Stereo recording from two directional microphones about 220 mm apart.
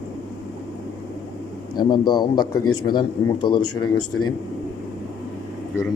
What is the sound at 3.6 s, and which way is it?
Speech, 90° left.